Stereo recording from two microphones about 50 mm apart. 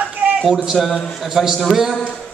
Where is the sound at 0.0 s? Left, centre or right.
Right.